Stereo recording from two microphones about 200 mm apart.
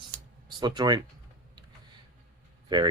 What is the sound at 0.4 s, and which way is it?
Speech, 20° right (ahead or behind).